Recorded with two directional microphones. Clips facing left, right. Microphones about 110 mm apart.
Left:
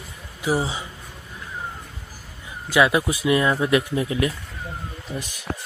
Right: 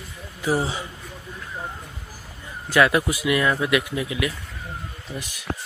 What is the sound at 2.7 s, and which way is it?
Speech, 20° left (ahead or behind).